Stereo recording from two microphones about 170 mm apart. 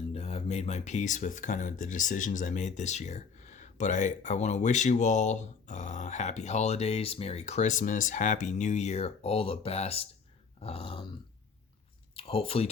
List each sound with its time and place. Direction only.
0.1 s speech: 35° left (ahead or behind)
12.1 s speech: 35° left (ahead or behind)